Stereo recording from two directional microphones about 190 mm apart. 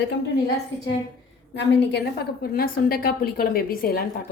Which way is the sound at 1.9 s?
60° left (ahead or behind).